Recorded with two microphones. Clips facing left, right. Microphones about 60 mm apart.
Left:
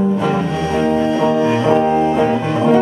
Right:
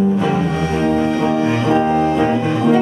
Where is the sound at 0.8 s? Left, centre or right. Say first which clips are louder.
Left 1 dB; left.